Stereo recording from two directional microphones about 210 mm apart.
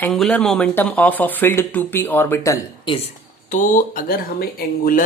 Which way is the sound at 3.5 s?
40° left (ahead or behind).